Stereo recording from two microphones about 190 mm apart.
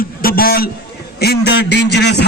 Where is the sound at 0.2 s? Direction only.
50° left (ahead or behind).